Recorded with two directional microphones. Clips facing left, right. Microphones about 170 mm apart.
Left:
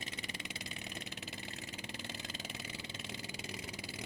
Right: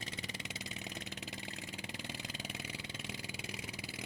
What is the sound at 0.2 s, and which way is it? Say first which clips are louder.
Vehicle: right 1 dB; 25° right (ahead or behind).